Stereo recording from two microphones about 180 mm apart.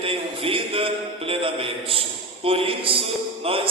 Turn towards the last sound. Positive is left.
turn(degrees=-30)  # may be behind; listen again after turning